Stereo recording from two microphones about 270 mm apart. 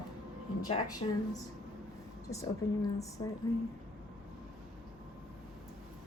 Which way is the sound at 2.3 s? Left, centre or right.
Centre.